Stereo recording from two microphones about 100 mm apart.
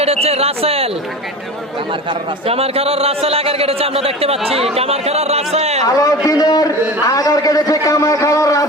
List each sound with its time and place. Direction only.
0.0 s a man's voice: 90° right
2.5 s a man's voice: 80° right
5.8 s a man's voice: 35° left (ahead or behind)